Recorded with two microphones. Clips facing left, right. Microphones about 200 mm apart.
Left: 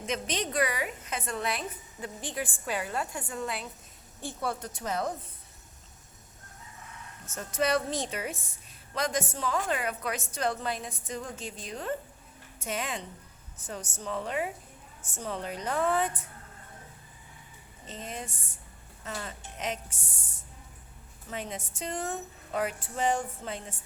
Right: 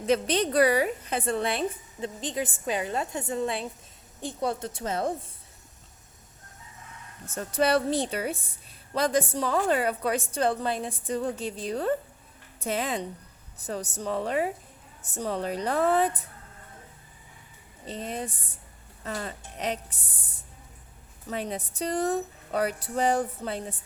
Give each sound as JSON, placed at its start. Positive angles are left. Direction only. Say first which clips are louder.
{"t": 0.0, "sound": "a woman's voice", "louder": "right 8 dB", "side_deg": -35}
{"t": 7.3, "sound": "a woman's voice", "louder": "right 4 dB", "side_deg": -35}
{"t": 17.8, "sound": "a woman's voice", "louder": "right 6 dB", "side_deg": -35}
{"t": 21.2, "sound": "a woman's voice", "louder": "right 5 dB", "side_deg": -35}